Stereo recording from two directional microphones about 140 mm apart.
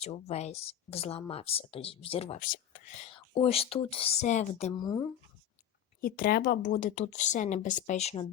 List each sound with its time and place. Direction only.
0.0 s speech: 50° left (ahead or behind)
2.4 s speech: 70° left (ahead or behind)
3.1 s speech: 40° left (ahead or behind)
6.0 s a woman's voice: 90° left; by 8.3 s 45° left (ahead or behind)